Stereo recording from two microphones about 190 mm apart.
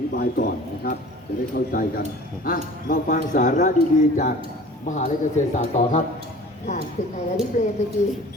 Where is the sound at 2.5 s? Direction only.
45° left (ahead or behind).